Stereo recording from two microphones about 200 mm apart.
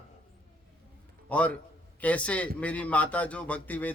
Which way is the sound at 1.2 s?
5° left (ahead or behind).